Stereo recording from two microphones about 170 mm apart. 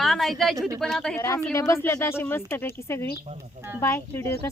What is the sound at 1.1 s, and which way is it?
Speech, 15° left (ahead or behind).